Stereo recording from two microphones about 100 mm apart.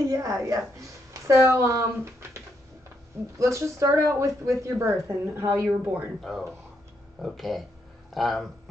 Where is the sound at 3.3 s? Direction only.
30° right (ahead or behind).